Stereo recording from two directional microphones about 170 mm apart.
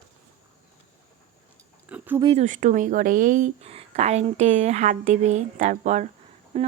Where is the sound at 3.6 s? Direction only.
35° right (ahead or behind).